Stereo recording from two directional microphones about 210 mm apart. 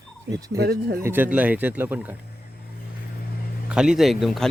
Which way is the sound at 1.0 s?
10° right (ahead or behind).